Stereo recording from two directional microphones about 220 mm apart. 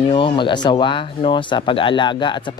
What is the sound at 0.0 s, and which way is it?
Speech, 20° left (ahead or behind).